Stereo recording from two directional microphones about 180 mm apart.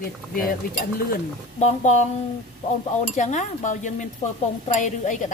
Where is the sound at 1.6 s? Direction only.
40° left (ahead or behind).